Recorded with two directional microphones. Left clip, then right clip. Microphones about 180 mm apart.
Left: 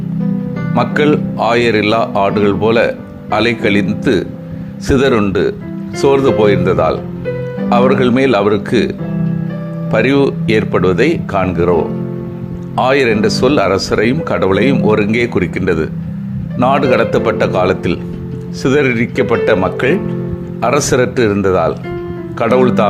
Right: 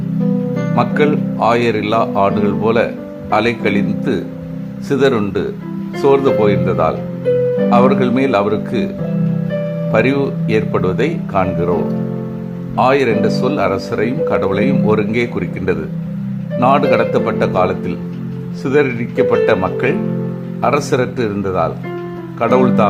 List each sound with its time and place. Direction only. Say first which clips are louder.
0.8 s speech: left 3 dB; 15° left (ahead or behind)
9.9 s speech: left 3 dB; 20° left (ahead or behind)